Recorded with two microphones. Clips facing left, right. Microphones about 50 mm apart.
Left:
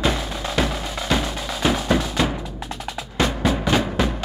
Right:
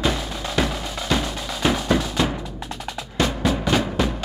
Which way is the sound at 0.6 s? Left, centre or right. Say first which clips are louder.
Left 1 dB; centre.